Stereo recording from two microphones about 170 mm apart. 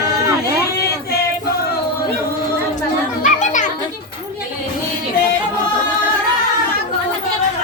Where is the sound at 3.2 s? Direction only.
45° left (ahead or behind).